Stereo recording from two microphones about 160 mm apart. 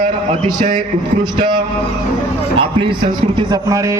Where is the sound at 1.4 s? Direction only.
30° right (ahead or behind).